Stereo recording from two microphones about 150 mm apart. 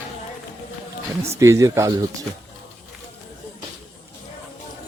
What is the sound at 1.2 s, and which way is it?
Speech, 20° right (ahead or behind).